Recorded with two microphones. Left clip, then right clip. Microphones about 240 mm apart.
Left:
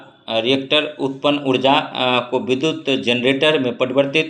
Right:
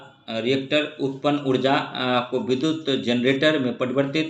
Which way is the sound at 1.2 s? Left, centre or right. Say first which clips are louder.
Left 5 dB; centre.